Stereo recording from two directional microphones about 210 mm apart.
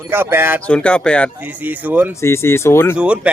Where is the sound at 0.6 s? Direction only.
5° left (ahead or behind).